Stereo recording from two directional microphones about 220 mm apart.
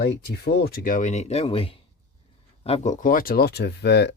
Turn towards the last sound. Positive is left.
turn(degrees=50)  # may be behind; listen again after turning